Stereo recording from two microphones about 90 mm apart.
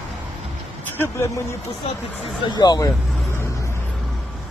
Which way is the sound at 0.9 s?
25° left (ahead or behind).